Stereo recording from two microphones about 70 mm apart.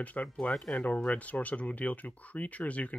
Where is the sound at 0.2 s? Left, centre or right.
Centre.